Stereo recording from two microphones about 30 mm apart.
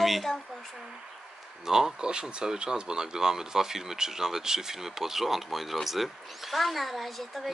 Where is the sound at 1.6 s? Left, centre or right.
Centre.